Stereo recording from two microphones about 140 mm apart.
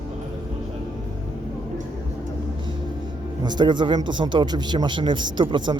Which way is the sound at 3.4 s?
30° right (ahead or behind).